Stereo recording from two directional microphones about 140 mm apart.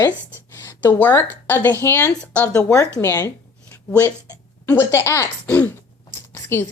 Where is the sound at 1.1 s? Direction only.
15° left (ahead or behind).